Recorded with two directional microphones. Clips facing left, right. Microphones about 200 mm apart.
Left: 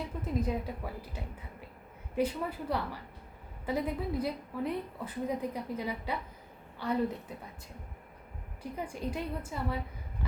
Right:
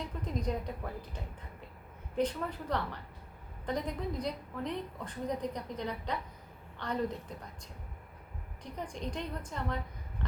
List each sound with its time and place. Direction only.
0.2 s a woman's voice: 5° left (ahead or behind)
8.6 s a woman's voice: 5° left (ahead or behind)